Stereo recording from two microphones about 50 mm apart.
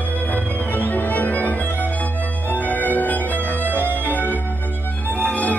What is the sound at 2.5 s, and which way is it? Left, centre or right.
Violin, left.